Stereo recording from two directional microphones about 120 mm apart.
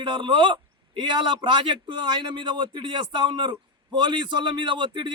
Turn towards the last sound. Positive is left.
turn(degrees=-40)  # may be behind; listen again after turning